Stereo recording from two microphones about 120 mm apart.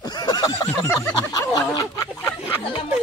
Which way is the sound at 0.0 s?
35° left (ahead or behind).